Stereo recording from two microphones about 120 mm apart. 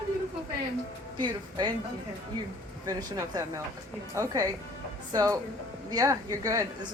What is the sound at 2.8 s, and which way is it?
Speech, 30° right (ahead or behind).